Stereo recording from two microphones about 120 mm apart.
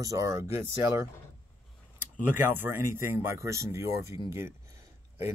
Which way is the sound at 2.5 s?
20° right (ahead or behind).